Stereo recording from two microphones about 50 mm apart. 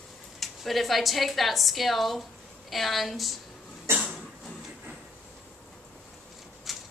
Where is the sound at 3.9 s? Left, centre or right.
Right.